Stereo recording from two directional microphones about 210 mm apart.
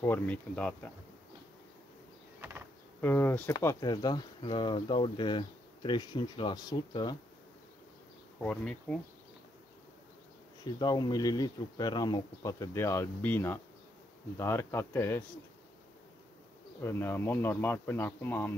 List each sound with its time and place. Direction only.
0.0 s speech: 10° left (ahead or behind)
3.0 s speech: 10° left (ahead or behind)
8.4 s speech: 5° left (ahead or behind)
10.6 s speech: 20° left (ahead or behind)
16.8 s speech: 10° left (ahead or behind)